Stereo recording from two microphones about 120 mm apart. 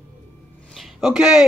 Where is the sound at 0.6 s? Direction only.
Centre (ahead or behind).